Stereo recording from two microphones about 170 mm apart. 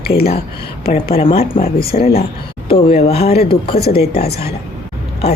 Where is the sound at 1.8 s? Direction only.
65° left (ahead or behind).